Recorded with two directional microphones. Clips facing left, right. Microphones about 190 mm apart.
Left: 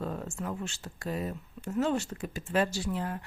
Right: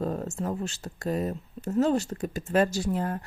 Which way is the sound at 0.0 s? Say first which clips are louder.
Right 5 dB; 40° right (ahead or behind).